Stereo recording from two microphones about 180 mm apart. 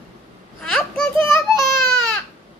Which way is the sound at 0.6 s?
5° left (ahead or behind).